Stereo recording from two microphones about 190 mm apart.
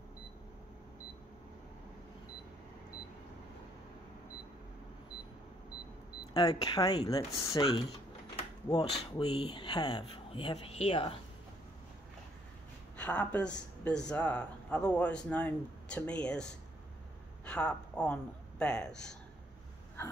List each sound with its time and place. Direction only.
6.3 s speech: 20° left (ahead or behind)
8.4 s a sound: 20° left (ahead or behind)
9.1 s speech: 25° left (ahead or behind)
12.9 s speech: 5° left (ahead or behind)
17.5 s speech: 5° left (ahead or behind)
20.0 s a sound: 10° left (ahead or behind)